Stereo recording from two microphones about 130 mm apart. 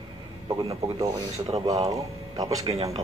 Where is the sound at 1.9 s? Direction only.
25° right (ahead or behind).